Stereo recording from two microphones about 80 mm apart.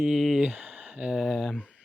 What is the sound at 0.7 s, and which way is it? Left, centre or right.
Speech, centre.